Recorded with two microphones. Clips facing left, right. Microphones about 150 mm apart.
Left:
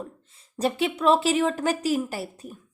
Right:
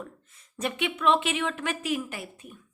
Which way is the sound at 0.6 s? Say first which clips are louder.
Left 4 dB; 35° left (ahead or behind).